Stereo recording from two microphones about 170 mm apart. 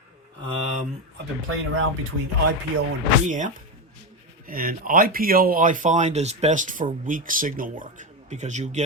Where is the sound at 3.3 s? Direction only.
50° right (ahead or behind).